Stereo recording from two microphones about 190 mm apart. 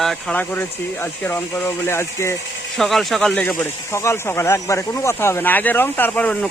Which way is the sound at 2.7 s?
Centre (ahead or behind).